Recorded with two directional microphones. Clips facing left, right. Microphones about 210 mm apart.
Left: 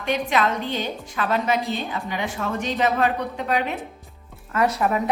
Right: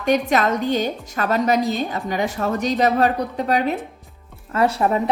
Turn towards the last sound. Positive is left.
turn(degrees=-30)  # may be behind; listen again after turning